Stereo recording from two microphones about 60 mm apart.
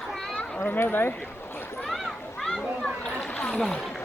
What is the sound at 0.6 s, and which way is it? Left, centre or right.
Speech, left.